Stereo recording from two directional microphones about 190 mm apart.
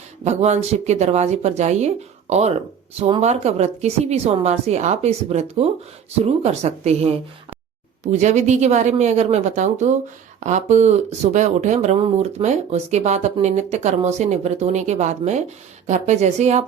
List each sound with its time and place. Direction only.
0.3 s speech: 35° right (ahead or behind)